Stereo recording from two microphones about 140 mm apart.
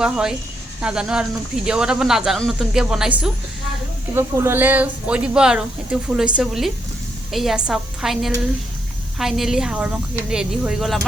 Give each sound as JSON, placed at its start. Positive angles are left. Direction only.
{"t": 0.0, "sound": "speech", "side_deg": -5}
{"t": 4.1, "sound": "speech", "side_deg": -20}